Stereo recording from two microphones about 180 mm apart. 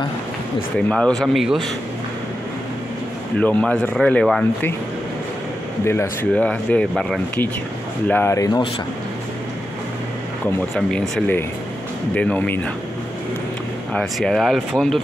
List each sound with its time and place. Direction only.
0.7 s speech: 5° left (ahead or behind)
3.3 s speech: 5° left (ahead or behind)
5.9 s speech: 10° left (ahead or behind)
10.4 s speech: 5° left (ahead or behind)
13.9 s speech: centre (ahead or behind)